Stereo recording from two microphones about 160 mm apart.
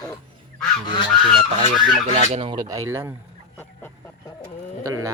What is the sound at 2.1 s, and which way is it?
Speech, 40° right (ahead or behind).